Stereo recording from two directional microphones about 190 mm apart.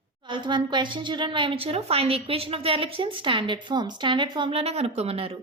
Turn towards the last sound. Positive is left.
turn(degrees=-30)  # may be behind; listen again after turning